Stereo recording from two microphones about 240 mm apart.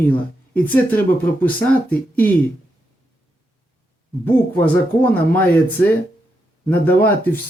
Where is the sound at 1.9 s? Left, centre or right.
Centre.